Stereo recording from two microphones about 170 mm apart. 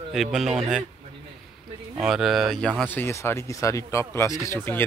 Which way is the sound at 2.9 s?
15° left (ahead or behind).